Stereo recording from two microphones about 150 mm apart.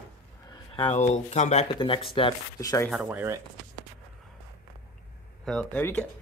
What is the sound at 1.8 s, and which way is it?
Speech, 35° left (ahead or behind).